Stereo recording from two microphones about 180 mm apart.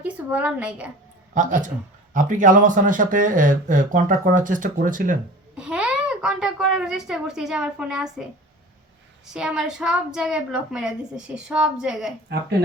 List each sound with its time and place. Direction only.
0.0 s a woman's voice: 10° right (ahead or behind)
1.3 s speech: 45° right (ahead or behind)
5.5 s a child's voice: 5° right (ahead or behind)
9.2 s a child's voice: 5° right (ahead or behind)